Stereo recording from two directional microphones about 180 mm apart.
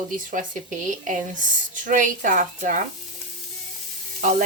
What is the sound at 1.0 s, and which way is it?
Speech, 45° right (ahead or behind).